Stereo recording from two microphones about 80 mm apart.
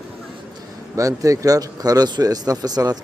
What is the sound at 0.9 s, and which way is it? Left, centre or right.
A man's voice, right.